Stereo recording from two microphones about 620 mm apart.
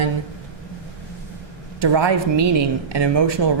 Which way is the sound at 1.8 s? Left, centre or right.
Right.